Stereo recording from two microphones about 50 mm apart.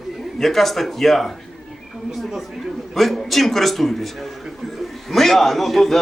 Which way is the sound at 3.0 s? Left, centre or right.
Centre.